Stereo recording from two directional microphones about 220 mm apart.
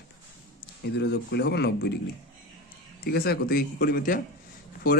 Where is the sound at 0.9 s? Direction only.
50° left (ahead or behind).